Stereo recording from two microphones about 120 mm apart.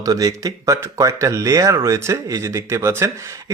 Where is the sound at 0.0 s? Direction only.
30° right (ahead or behind).